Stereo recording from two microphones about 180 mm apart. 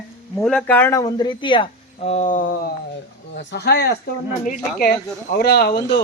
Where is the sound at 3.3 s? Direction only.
70° left (ahead or behind).